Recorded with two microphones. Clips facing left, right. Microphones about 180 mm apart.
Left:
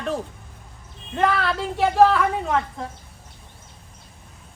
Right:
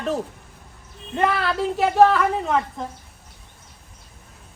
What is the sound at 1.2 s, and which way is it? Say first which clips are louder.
Speech: even; centre (ahead or behind).